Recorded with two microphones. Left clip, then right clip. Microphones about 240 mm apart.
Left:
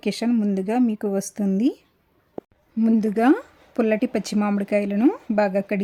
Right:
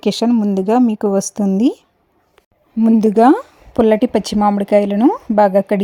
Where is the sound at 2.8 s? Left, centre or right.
Centre.